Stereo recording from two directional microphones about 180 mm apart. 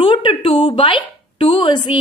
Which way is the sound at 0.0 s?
25° left (ahead or behind).